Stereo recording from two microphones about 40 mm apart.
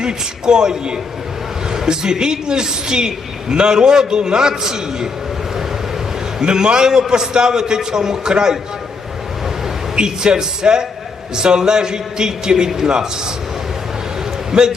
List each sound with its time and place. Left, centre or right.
0.0 s a man's voice: centre
6.4 s a man's voice: right
9.9 s a man's voice: centre
14.5 s a man's voice: centre